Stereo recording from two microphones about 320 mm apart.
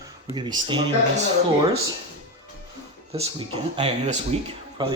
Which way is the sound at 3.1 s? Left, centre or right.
Centre.